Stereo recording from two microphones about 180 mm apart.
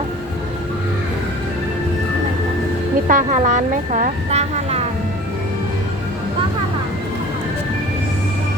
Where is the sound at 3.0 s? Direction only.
45° right (ahead or behind).